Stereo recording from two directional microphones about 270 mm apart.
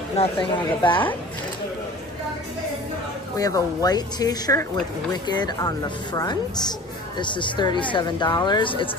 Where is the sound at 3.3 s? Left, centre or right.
Centre.